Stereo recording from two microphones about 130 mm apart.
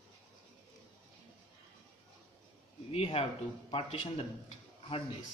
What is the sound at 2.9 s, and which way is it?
A man's voice, 50° left (ahead or behind).